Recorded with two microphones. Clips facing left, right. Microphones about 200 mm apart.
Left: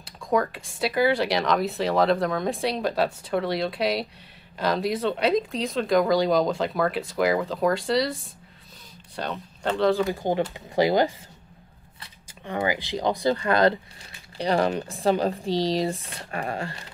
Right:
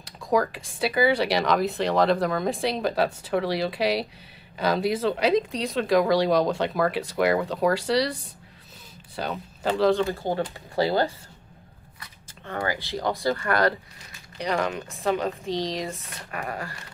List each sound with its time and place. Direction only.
0.0 s speech: centre (ahead or behind)
10.0 s speech: 15° left (ahead or behind)
12.4 s speech: 15° left (ahead or behind)
14.4 s speech: 30° left (ahead or behind)